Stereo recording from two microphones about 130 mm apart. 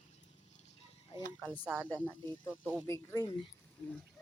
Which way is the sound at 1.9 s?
15° left (ahead or behind).